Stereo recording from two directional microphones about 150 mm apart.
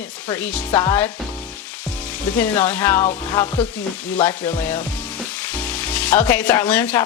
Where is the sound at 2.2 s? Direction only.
10° left (ahead or behind).